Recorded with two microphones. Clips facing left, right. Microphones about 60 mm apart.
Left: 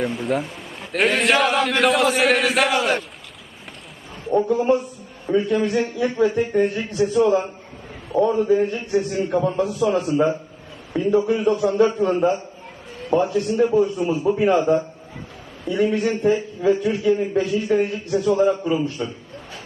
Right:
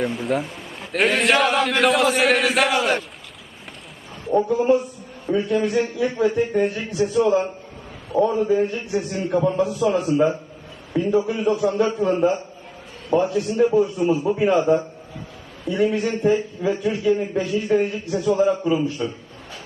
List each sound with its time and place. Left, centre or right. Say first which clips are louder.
0.0 s a man's voice: even; centre
4.3 s a man's voice: even; centre